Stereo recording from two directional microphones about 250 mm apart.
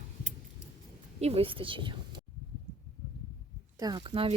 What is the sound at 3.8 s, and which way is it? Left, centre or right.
Speech, centre.